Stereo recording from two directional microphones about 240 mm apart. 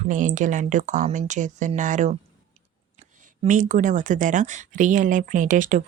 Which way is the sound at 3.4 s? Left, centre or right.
Right.